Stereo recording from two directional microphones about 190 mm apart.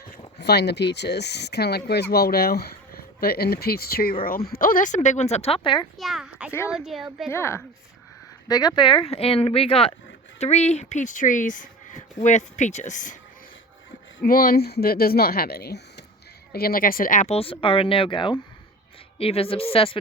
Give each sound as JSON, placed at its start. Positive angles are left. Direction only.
{"t": 0.3, "sound": "speech", "side_deg": 60}
{"t": 5.6, "sound": "speech", "side_deg": 25}
{"t": 6.0, "sound": "a sound", "side_deg": 0}
{"t": 6.7, "sound": "speech", "side_deg": -5}
{"t": 7.3, "sound": "a woman's voice", "side_deg": 15}
{"t": 14.2, "sound": "speech", "side_deg": 50}